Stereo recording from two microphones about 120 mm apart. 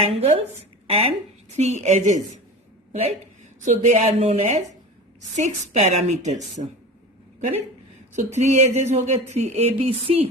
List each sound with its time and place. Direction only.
0.0 s speech: 60° right (ahead or behind)
1.5 s speech: 70° right (ahead or behind)
2.9 s a woman's voice: 60° right (ahead or behind)
3.6 s speech: 70° right (ahead or behind)
8.1 s speech: 70° right (ahead or behind)